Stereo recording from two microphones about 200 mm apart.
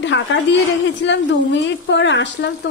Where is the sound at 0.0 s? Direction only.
65° left (ahead or behind).